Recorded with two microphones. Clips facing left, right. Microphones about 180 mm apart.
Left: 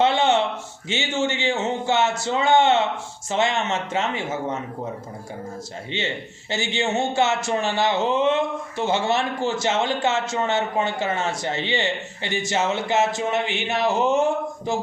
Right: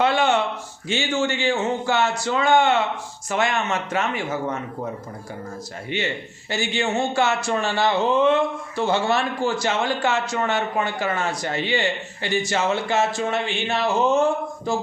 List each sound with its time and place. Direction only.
0.0 s a sound: 25° left (ahead or behind)
0.9 s speech: 20° left (ahead or behind)
5.9 s speech: 25° left (ahead or behind)